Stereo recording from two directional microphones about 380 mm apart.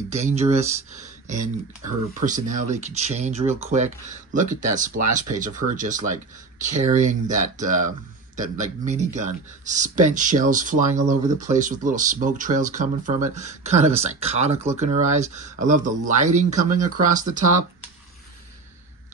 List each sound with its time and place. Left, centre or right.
0.1 s speech: centre